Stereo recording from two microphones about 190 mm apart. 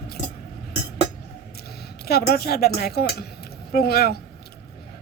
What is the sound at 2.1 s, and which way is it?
A woman's voice, 55° left (ahead or behind).